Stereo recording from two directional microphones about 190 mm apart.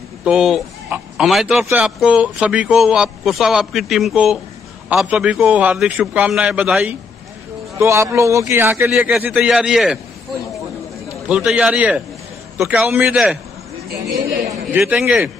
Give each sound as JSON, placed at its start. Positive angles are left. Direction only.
{"t": 0.2, "sound": "a man's voice", "side_deg": -5}
{"t": 11.2, "sound": "a man's voice", "side_deg": -5}
{"t": 14.7, "sound": "speech", "side_deg": -5}